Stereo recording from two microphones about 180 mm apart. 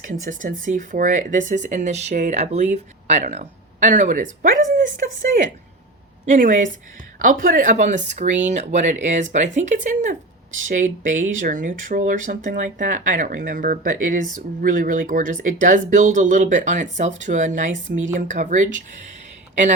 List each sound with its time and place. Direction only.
0.0 s speech: 45° right (ahead or behind)
6.3 s speech: 45° right (ahead or behind)